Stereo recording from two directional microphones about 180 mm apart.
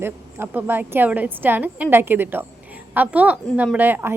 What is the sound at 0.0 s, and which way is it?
A woman's voice, 10° right (ahead or behind).